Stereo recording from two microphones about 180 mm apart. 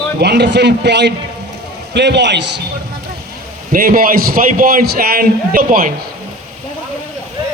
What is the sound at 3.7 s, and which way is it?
A man's voice, 50° right (ahead or behind).